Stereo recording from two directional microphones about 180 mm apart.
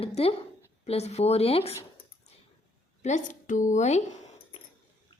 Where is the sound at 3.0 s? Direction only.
40° left (ahead or behind).